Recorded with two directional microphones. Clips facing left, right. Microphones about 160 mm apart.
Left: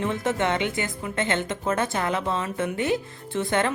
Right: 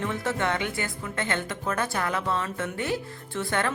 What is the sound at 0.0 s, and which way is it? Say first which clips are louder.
A woman's voice: left 3 dB; 20° left (ahead or behind).